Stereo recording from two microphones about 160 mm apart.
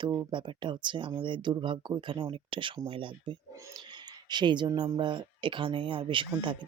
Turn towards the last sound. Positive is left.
turn(degrees=-30)  # may be behind; listen again after turning